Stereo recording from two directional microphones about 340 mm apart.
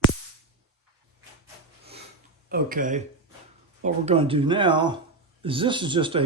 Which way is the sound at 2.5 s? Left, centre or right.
Right.